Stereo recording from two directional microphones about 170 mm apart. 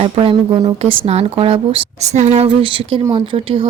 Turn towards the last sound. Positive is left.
turn(degrees=-30)  # may be behind; listen again after turning